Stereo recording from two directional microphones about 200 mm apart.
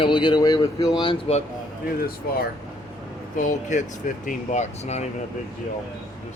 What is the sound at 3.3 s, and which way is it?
Speech, 40° left (ahead or behind).